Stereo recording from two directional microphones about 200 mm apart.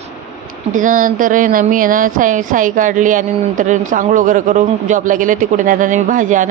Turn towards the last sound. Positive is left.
turn(degrees=-40)  # may be behind; listen again after turning